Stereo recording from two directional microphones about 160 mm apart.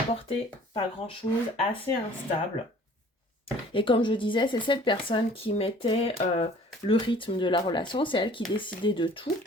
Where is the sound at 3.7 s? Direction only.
30° left (ahead or behind).